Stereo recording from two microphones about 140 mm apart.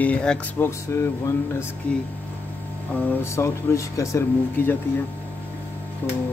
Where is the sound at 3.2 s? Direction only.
20° left (ahead or behind).